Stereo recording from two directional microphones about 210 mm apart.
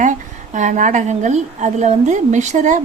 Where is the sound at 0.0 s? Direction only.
35° right (ahead or behind).